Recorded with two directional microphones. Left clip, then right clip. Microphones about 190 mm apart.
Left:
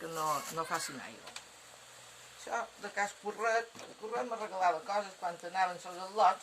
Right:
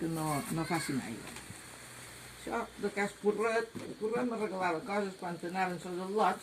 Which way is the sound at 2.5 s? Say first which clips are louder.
Right 1 dB; centre (ahead or behind).